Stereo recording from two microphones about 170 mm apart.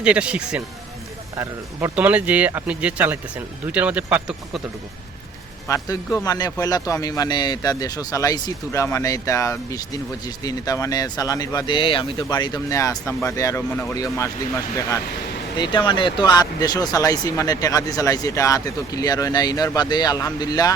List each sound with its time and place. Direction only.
0.0 s speech: 5° right (ahead or behind)
5.6 s speech: 20° left (ahead or behind)